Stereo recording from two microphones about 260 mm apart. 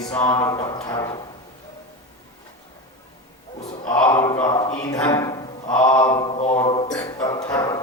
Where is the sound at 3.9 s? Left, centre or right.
Centre.